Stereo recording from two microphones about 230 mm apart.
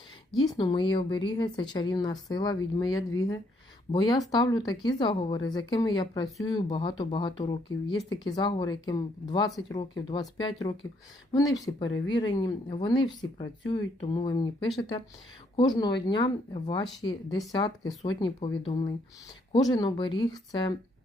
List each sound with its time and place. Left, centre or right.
0.3 s speech: centre